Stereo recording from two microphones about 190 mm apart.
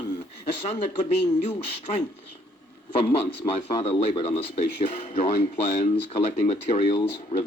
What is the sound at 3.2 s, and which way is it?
A man's voice, 30° left (ahead or behind).